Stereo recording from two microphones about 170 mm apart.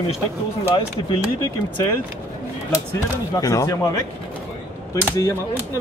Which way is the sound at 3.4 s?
20° left (ahead or behind).